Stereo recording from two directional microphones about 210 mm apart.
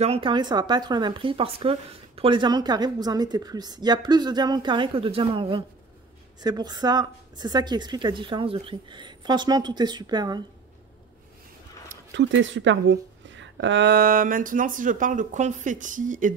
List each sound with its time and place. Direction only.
0.0 s speech: 25° right (ahead or behind)
12.1 s a woman's voice: 60° right (ahead or behind); by 16.3 s 40° right (ahead or behind)